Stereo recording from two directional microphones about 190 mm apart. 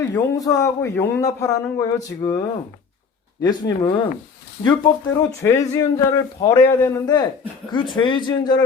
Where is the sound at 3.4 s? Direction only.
20° left (ahead or behind).